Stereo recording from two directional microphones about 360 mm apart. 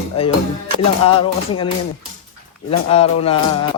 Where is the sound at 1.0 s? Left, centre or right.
Centre.